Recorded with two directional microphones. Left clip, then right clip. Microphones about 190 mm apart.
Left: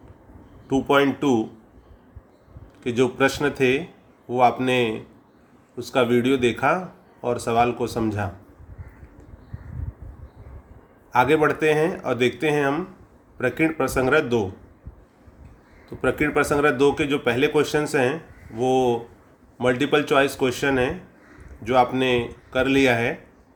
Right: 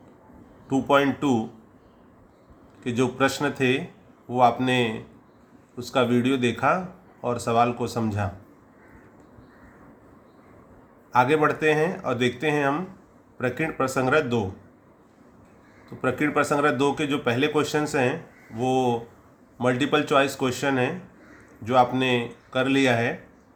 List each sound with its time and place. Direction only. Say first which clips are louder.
0.7 s speech: left 2 dB; 15° left (ahead or behind)
2.8 s speech: left 3 dB; 15° left (ahead or behind)
11.1 s speech: left 2 dB; 15° left (ahead or behind)
16.0 s speech: left 2 dB; 15° left (ahead or behind)